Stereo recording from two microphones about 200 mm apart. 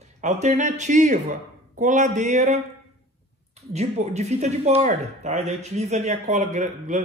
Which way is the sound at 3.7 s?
35° right (ahead or behind).